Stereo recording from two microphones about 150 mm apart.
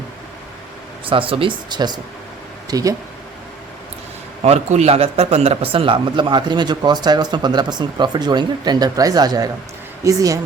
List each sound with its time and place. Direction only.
1.0 s speech: 35° right (ahead or behind)
4.4 s a man's voice: 45° right (ahead or behind); by 10.4 s 20° right (ahead or behind)